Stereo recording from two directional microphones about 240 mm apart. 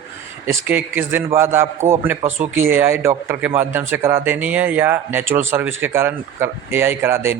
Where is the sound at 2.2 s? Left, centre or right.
Right.